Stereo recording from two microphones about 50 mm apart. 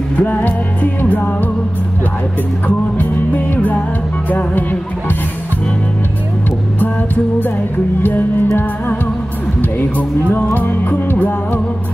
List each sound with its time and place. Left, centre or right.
0.2 s music: left
3.0 s music: left
8.0 s music: left
9.6 s speech: left
10.3 s music: left